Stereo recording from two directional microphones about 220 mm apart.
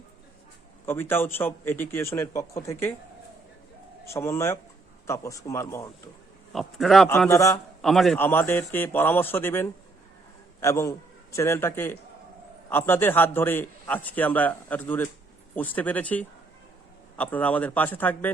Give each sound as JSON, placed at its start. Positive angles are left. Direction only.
{"t": 0.9, "sound": "a man's voice", "side_deg": 10}
{"t": 4.1, "sound": "a man's voice", "side_deg": 10}
{"t": 6.5, "sound": "speech", "side_deg": 0}
{"t": 7.3, "sound": "a man's voice", "side_deg": 15}
{"t": 7.8, "sound": "a man's voice", "side_deg": 0}